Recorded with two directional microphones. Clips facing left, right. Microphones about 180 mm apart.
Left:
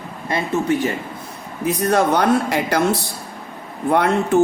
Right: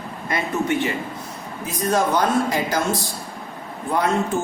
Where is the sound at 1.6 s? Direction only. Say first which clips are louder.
Left 4 dB; 65° left (ahead or behind).